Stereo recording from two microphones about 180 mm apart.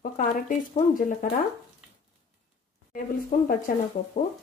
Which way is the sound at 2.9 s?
50° left (ahead or behind).